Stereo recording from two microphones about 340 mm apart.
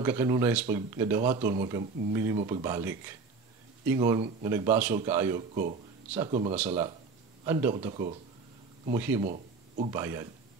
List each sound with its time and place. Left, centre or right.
0.0 s speech: centre
5.6 s speech: centre
8.9 s speech: centre
9.2 s speech: centre